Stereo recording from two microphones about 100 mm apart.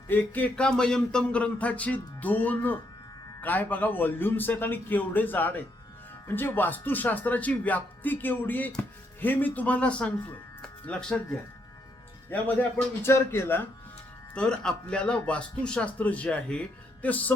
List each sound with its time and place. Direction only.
0.1 s a man's voice: 15° left (ahead or behind)
14.3 s speech: 10° left (ahead or behind)